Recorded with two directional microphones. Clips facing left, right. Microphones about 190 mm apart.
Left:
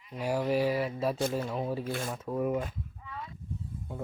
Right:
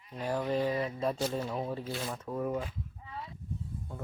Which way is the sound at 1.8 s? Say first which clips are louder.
Left 3 dB; 55° left (ahead or behind).